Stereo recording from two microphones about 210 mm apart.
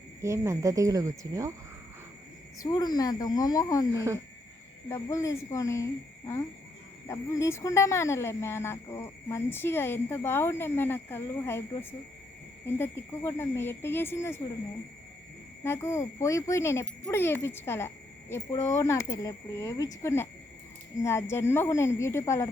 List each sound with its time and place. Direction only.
0.2 s speech: 15° right (ahead or behind)
2.6 s speech: 20° left (ahead or behind)
4.9 s speech: 15° left (ahead or behind)
15.6 s speech: 10° left (ahead or behind)